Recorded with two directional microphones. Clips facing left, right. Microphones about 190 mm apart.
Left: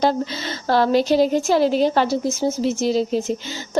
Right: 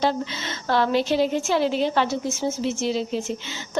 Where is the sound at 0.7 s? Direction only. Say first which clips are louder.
Left 4 dB; 40° left (ahead or behind).